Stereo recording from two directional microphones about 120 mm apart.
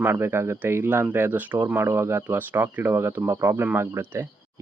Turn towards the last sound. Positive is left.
turn(degrees=-20)  # may be behind; listen again after turning